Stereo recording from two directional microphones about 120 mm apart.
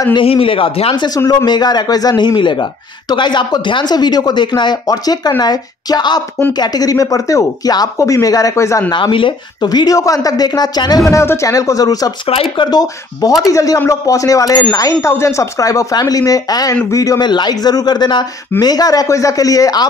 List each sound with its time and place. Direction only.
0.1 s speech: 50° left (ahead or behind)
1.0 s speech: 35° left (ahead or behind)
8.9 s speech: 45° left (ahead or behind)
12.3 s speech: 50° left (ahead or behind)
13.5 s speech: 30° left (ahead or behind)